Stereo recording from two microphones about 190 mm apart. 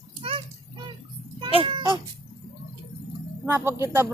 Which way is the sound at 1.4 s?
25° right (ahead or behind).